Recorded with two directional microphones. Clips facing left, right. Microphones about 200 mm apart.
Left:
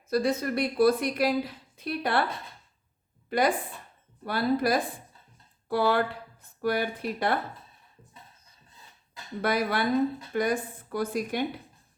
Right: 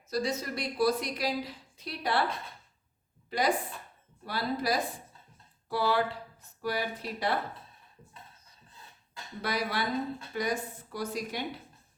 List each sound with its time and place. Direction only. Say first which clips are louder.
0.1 s a woman's voice: left 6 dB; 55° left (ahead or behind)
3.2 s a woman's voice: left 3 dB; 55° left (ahead or behind)
9.4 s a woman's voice: left 6 dB; 55° left (ahead or behind)